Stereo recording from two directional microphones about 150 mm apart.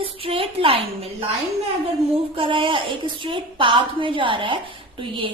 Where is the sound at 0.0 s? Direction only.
35° right (ahead or behind).